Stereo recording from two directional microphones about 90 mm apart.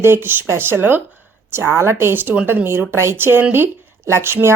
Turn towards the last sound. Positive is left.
turn(degrees=-25)  # may be behind; listen again after turning